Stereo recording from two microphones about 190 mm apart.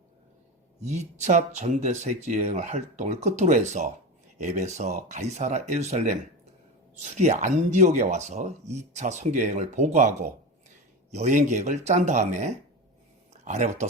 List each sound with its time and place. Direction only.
0.8 s speech: 35° right (ahead or behind)